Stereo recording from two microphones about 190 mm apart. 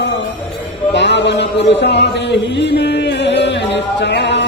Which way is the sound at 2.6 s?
65° left (ahead or behind).